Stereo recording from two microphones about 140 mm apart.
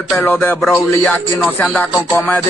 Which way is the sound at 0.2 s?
15° left (ahead or behind).